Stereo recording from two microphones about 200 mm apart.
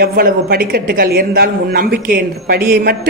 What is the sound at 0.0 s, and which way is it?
A woman's voice, 50° right (ahead or behind).